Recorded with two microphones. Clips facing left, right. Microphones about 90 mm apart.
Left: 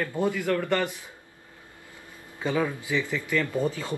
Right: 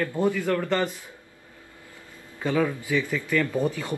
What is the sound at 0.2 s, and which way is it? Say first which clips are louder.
Speech: right 2 dB; 15° left (ahead or behind).